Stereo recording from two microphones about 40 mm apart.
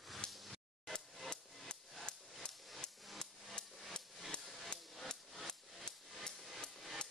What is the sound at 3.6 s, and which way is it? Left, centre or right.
Hammer, left.